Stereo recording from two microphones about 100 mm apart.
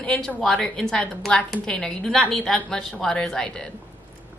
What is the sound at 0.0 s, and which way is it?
A woman's voice, 5° left (ahead or behind).